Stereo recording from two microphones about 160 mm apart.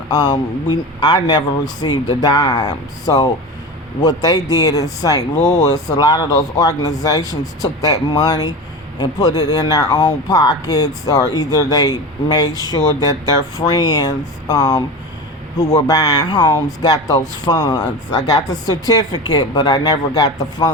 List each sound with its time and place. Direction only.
0.1 s speech: 25° left (ahead or behind)